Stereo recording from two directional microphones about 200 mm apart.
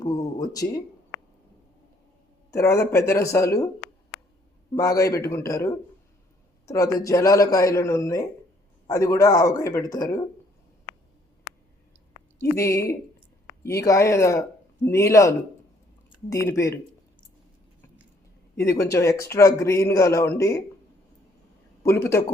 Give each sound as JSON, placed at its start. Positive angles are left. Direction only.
{"t": 0.0, "sound": "a sound", "side_deg": 20}
{"t": 2.5, "sound": "a man's voice", "side_deg": 15}
{"t": 4.7, "sound": "a man's voice", "side_deg": 15}
{"t": 12.4, "sound": "a man's voice", "side_deg": 15}
{"t": 18.5, "sound": "a man's voice", "side_deg": 15}
{"t": 21.8, "sound": "a man's voice", "side_deg": 10}